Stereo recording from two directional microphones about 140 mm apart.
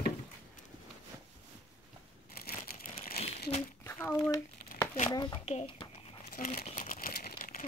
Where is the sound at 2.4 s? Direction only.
90° left.